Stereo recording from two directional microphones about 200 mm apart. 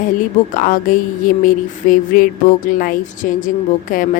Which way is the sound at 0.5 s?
45° left (ahead or behind).